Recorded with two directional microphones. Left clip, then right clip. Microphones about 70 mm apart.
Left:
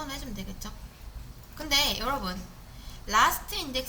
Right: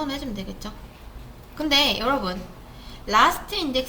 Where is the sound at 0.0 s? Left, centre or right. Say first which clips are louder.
Right 8 dB; left.